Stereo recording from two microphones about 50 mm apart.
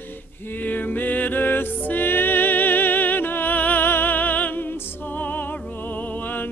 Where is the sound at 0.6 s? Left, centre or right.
Left.